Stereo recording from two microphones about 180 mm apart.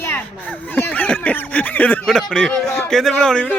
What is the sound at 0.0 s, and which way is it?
Speech, 10° left (ahead or behind).